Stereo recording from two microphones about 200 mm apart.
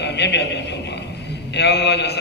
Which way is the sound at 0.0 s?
60° left (ahead or behind).